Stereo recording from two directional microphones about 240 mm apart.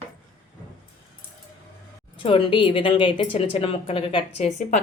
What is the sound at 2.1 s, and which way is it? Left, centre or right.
A woman's voice, left.